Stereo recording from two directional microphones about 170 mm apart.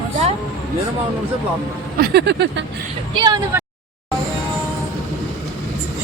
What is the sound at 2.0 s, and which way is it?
Speech, 75° right (ahead or behind).